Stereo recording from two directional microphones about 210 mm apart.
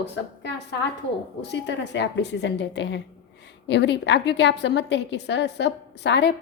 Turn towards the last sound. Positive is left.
turn(degrees=55)  # may be behind; listen again after turning